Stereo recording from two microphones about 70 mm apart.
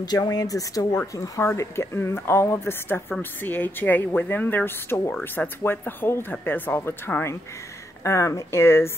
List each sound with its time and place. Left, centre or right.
0.0 s speech: left
1.5 s a woman's voice: left
3.2 s a woman's voice: left
8.0 s speech: left